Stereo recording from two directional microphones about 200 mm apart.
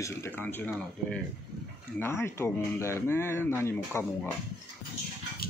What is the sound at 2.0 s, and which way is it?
Speech, 10° left (ahead or behind).